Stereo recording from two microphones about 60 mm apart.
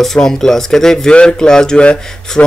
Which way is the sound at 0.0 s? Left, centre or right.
Centre.